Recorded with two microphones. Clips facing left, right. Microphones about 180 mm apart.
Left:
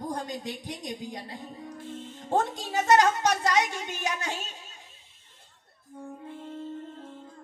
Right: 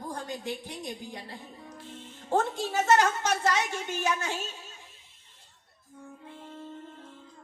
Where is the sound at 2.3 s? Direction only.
15° left (ahead or behind).